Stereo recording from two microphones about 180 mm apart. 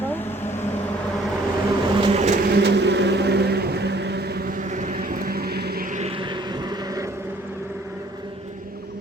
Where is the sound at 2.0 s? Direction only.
40° right (ahead or behind).